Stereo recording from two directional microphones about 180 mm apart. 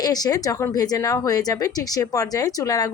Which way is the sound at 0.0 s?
20° left (ahead or behind).